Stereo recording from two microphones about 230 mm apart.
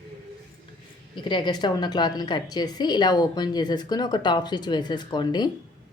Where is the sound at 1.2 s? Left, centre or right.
Centre.